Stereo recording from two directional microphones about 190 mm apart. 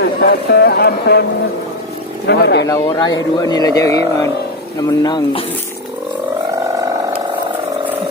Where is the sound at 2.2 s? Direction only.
60° left (ahead or behind).